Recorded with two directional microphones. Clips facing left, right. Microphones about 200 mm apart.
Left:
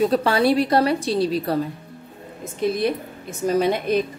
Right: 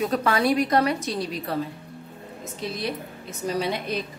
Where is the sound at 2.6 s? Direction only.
55° left (ahead or behind).